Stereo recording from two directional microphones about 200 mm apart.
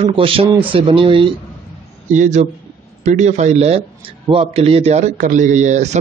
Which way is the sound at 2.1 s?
35° right (ahead or behind).